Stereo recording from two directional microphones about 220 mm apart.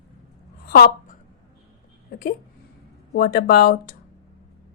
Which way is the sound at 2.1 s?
45° left (ahead or behind).